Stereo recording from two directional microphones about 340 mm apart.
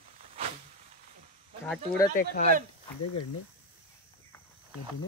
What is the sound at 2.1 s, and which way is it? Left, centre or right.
Speech, left.